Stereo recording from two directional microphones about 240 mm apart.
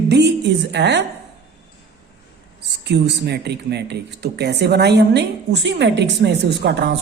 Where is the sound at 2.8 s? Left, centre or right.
Right.